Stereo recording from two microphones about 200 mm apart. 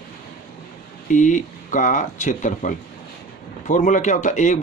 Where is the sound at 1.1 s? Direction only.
40° left (ahead or behind).